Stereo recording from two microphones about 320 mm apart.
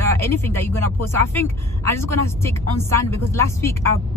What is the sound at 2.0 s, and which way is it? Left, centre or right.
A woman's voice, centre.